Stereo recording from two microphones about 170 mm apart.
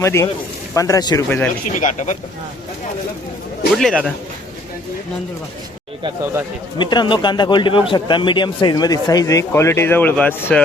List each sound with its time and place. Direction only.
0.0 s a man's voice: 15° left (ahead or behind)
1.6 s speech: 45° left (ahead or behind)
3.8 s speech: centre (ahead or behind)
6.7 s a man's voice: 25° left (ahead or behind); by 10.6 s 10° left (ahead or behind)